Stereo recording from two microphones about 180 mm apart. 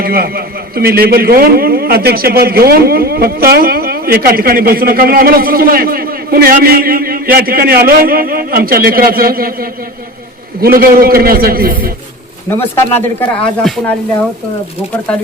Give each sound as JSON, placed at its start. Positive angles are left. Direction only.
{"t": 0.0, "sound": "a man's voice", "side_deg": -55}
{"t": 12.5, "sound": "speech", "side_deg": 15}